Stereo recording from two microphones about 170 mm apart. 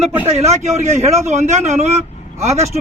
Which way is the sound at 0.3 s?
40° right (ahead or behind).